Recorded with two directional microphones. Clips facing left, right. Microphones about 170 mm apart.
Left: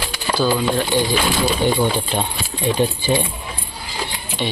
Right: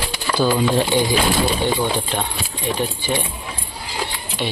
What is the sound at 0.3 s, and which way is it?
Speech, 20° right (ahead or behind).